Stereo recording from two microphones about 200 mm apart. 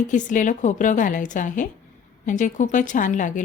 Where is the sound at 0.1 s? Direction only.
40° left (ahead or behind).